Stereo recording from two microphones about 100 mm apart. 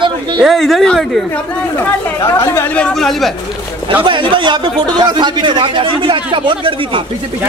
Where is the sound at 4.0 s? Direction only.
55° right (ahead or behind).